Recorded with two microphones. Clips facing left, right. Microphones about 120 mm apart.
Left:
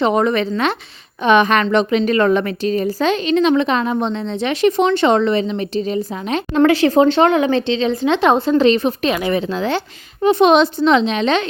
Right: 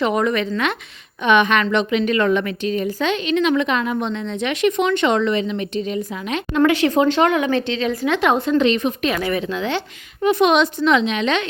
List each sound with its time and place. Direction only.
0.0 s a woman's voice: 30° left (ahead or behind)